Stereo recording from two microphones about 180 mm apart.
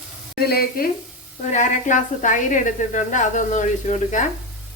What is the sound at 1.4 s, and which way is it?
A woman's voice, 45° left (ahead or behind).